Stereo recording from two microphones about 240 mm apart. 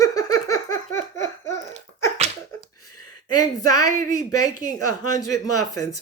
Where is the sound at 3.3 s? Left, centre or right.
Centre.